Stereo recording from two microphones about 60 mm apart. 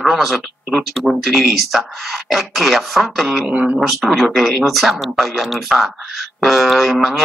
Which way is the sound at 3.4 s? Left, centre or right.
Right.